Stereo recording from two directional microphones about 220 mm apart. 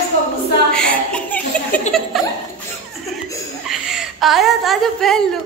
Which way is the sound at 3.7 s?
Centre (ahead or behind).